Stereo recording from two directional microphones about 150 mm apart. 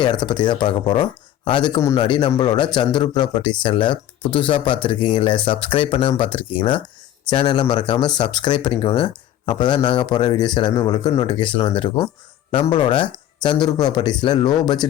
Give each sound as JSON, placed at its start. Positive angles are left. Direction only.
{"t": 0.0, "sound": "speech", "side_deg": 30}